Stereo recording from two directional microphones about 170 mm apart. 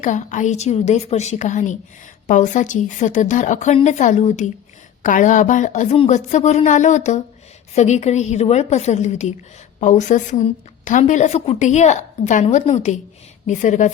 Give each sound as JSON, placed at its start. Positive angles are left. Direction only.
{"t": 0.0, "sound": "a woman's voice", "side_deg": 45}